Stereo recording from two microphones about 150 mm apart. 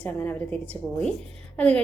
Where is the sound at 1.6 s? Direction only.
10° left (ahead or behind).